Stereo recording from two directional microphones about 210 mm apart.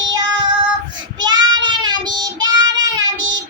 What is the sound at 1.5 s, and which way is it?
Child singing, 20° right (ahead or behind).